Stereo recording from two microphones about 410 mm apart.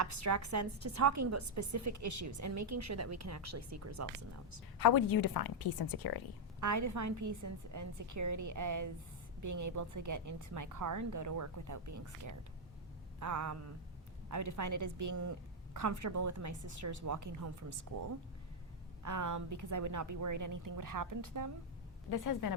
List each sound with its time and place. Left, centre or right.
0.0 s a woman's voice: right
4.8 s a woman's voice: left
6.6 s a woman's voice: right
13.1 s a sound: right
14.3 s a woman's voice: right
19.0 s a woman's voice: right
22.1 s a woman's voice: left